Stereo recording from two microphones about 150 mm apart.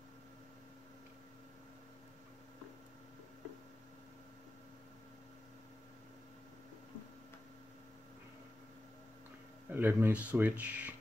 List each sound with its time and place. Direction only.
9.7 s speech: 15° right (ahead or behind)